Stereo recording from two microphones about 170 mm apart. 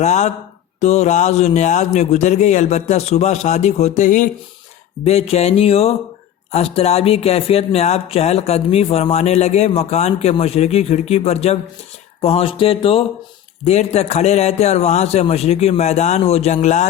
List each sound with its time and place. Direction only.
0.0 s a man's voice: 45° left (ahead or behind)